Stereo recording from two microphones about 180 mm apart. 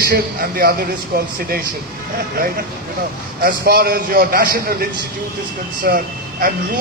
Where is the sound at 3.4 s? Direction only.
60° right (ahead or behind).